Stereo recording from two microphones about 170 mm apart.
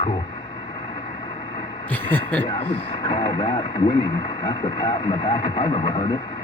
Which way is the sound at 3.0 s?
35° left (ahead or behind).